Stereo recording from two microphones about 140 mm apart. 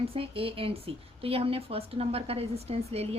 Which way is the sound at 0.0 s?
45° right (ahead or behind).